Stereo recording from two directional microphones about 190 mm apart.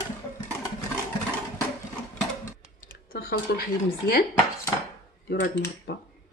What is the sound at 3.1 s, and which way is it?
Speech, 50° left (ahead or behind).